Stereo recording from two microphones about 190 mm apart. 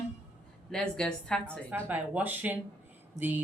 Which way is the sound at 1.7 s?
10° right (ahead or behind).